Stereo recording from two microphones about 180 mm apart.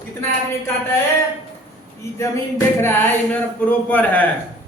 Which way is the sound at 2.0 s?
15° left (ahead or behind).